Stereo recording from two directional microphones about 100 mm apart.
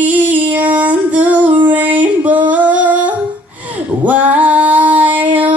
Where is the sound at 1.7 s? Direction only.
15° right (ahead or behind).